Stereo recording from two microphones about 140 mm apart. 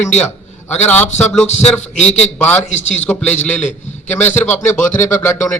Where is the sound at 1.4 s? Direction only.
55° left (ahead or behind).